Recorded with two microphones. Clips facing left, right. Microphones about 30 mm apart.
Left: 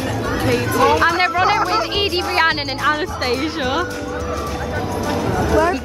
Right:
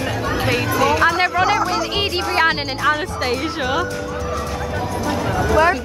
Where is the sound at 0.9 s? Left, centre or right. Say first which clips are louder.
Left 1 dB; centre.